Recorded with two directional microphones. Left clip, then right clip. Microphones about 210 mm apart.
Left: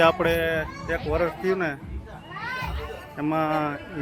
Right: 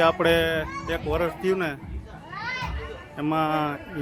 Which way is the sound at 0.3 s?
35° right (ahead or behind).